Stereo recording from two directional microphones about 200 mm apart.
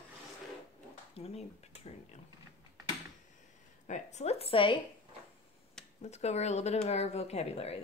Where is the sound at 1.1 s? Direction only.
30° left (ahead or behind).